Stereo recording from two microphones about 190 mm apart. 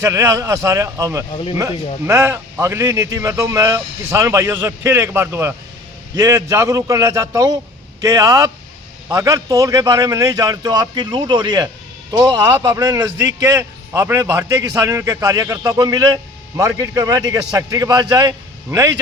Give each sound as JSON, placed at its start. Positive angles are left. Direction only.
{"t": 0.0, "sound": "a man's voice", "side_deg": -15}